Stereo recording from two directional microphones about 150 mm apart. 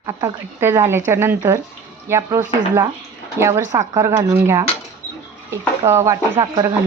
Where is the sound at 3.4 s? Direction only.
20° right (ahead or behind).